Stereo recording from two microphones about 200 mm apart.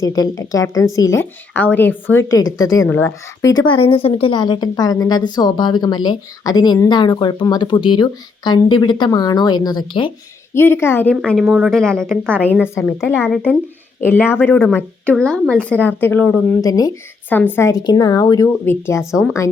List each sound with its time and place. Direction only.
0.0 s speech: 20° left (ahead or behind)
3.7 s a woman's voice: 25° left (ahead or behind)
10.5 s speech: 10° left (ahead or behind)